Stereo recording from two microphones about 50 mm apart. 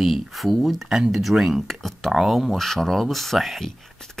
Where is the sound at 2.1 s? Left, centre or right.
Centre.